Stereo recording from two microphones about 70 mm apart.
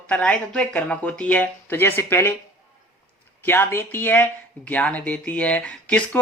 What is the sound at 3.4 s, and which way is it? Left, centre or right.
Speech, left.